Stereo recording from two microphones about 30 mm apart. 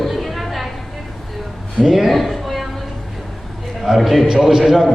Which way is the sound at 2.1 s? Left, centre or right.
Centre.